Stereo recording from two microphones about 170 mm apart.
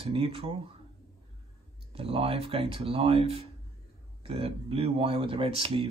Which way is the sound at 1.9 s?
35° right (ahead or behind).